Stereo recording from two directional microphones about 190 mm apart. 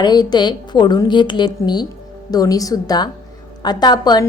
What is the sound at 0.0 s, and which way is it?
A woman's voice, 20° left (ahead or behind).